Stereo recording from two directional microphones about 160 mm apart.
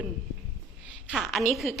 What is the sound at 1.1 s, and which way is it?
Speech, centre (ahead or behind).